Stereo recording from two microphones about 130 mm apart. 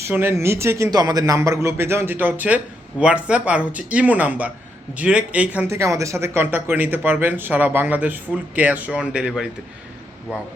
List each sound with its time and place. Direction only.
0.0 s a man's voice: 20° right (ahead or behind)
5.6 s speech: 20° right (ahead or behind); by 9.5 s 5° right (ahead or behind)